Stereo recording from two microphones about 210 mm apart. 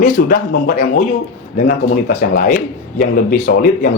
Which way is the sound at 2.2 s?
40° left (ahead or behind).